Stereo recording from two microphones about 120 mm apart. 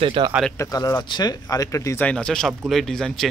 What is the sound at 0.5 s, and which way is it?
Speech, 30° left (ahead or behind).